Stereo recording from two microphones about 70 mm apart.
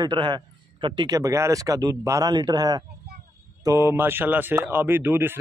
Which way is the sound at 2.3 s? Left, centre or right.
Right.